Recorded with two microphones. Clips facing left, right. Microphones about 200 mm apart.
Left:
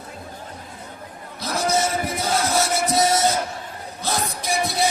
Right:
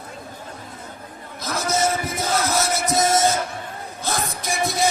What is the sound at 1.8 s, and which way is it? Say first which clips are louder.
Music: right 1 dB; 45° right (ahead or behind).